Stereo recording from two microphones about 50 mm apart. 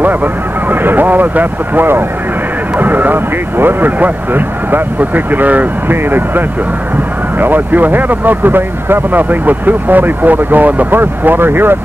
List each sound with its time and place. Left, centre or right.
0.0 s speech: right